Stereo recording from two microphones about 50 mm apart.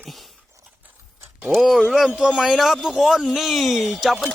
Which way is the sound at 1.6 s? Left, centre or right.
Centre.